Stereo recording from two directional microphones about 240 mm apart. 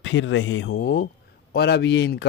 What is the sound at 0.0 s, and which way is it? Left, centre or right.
Speech, left.